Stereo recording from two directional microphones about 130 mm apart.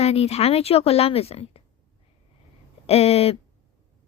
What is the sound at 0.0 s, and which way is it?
Speech, 50° left (ahead or behind).